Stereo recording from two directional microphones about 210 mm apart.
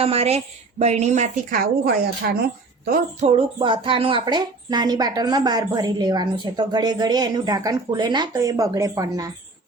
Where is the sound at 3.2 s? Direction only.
25° right (ahead or behind).